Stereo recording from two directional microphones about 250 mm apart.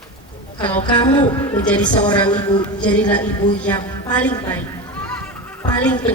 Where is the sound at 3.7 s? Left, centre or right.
Centre.